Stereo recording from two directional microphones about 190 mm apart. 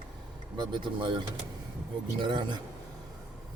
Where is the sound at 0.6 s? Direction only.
25° right (ahead or behind).